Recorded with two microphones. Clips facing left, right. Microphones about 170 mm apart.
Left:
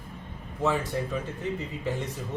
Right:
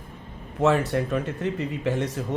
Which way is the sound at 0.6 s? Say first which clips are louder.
Right 6 dB; 70° right (ahead or behind).